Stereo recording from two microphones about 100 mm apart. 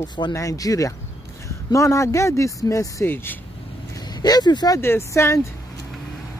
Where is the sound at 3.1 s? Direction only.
20° left (ahead or behind).